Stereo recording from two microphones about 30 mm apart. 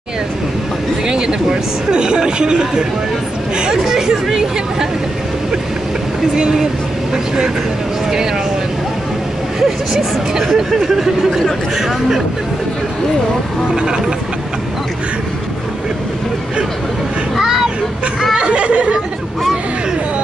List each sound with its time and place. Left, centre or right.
1.0 s speech: right
3.8 s speech: centre
9.6 s speech: centre
13.7 s speech: right
17.4 s vehicle: centre
18.4 s chatter: right